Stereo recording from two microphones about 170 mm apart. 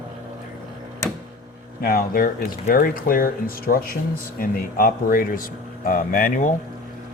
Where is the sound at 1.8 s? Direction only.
60° left (ahead or behind).